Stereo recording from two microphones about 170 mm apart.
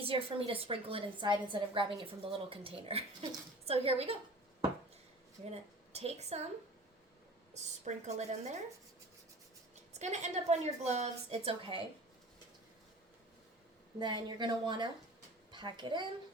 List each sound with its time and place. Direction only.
0.0 s a woman's voice: 35° right (ahead or behind)
5.5 s a woman's voice: 40° right (ahead or behind)
7.5 s a woman's voice: 40° right (ahead or behind)
9.9 s a woman's voice: 40° right (ahead or behind)
14.0 s speech: 25° right (ahead or behind)